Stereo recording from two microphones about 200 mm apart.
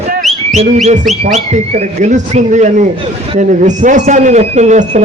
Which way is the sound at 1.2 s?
35° right (ahead or behind).